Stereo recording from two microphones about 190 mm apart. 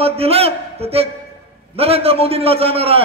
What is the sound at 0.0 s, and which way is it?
A man's voice, 30° right (ahead or behind).